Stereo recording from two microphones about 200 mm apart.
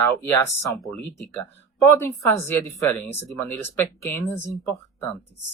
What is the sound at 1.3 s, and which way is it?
Speech, 15° left (ahead or behind).